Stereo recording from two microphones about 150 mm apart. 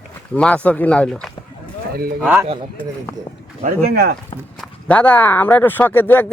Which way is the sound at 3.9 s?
90° right.